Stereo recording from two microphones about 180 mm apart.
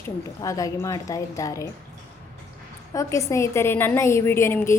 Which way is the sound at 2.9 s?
15° left (ahead or behind).